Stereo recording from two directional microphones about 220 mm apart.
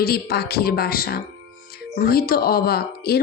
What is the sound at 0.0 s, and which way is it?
Speech, 45° left (ahead or behind).